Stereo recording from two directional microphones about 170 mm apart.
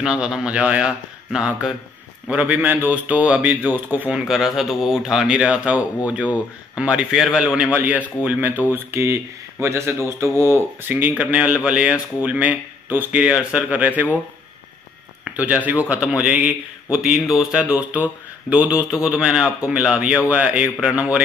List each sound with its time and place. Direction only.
0.0 s speech: 5° right (ahead or behind)
15.3 s speech: 10° right (ahead or behind)